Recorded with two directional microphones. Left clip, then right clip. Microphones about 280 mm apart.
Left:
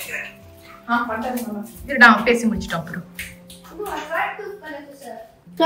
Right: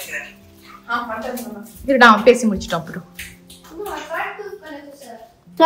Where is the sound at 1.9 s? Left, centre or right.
Centre.